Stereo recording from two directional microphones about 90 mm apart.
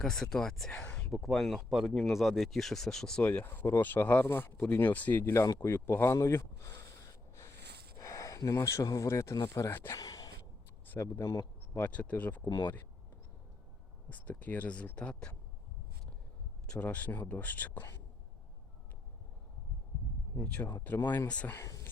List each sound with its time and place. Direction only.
0.0 s speech: 5° left (ahead or behind)
3.2 s speech: 20° left (ahead or behind)
5.5 s a sound: 25° left (ahead or behind)
7.9 s speech: 35° left (ahead or behind)
10.0 s a sound: 45° left (ahead or behind)
10.9 s speech: 25° left (ahead or behind)
11.9 s speech: 15° left (ahead or behind)
14.1 s speech: 20° left (ahead or behind)
16.6 s speech: 15° left (ahead or behind)
20.4 s speech: 15° left (ahead or behind)